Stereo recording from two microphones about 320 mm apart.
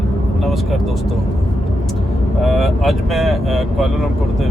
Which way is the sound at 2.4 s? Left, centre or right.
Centre.